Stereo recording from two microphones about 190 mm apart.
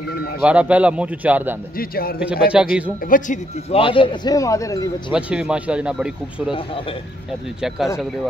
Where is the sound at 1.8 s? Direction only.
50° left (ahead or behind).